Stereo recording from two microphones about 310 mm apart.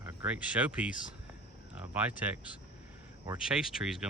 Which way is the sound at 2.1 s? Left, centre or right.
Centre.